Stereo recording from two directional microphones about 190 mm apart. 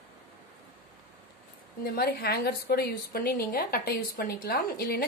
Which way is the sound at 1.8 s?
55° left (ahead or behind).